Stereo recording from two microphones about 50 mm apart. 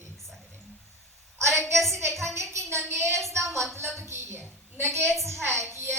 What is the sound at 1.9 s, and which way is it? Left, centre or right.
A woman's voice, right.